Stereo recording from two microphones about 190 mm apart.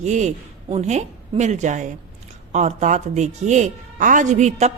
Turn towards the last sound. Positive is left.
turn(degrees=-40)  # may be behind; listen again after turning